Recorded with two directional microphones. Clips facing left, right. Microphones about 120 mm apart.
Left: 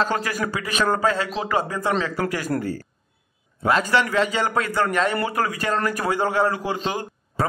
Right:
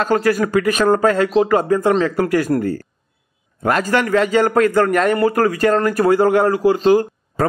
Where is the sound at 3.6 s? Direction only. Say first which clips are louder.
Right 3 dB; 50° right (ahead or behind).